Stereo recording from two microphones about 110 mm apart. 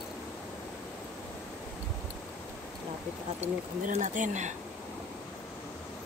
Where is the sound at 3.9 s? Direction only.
90° right.